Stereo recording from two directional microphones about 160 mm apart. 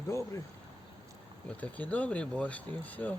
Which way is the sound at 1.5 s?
10° left (ahead or behind).